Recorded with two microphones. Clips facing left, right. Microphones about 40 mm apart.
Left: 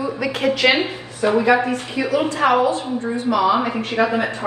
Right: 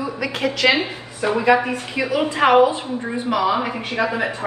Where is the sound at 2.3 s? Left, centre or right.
Right.